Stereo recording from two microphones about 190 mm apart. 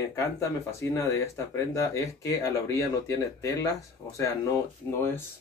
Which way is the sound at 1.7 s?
15° left (ahead or behind).